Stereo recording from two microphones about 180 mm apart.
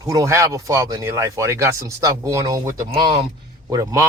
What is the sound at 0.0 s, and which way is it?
Speech, 20° right (ahead or behind).